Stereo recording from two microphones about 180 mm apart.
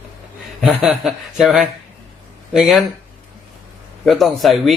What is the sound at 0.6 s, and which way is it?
Speech, centre (ahead or behind).